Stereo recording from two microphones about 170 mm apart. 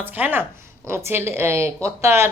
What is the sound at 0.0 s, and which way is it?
Speech, 10° right (ahead or behind).